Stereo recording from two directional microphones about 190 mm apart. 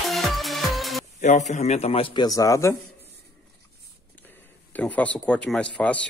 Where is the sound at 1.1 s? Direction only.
40° left (ahead or behind); by 2.7 s 15° left (ahead or behind).